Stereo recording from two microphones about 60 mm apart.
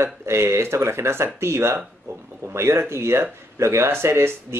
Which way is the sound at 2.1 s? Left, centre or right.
Right.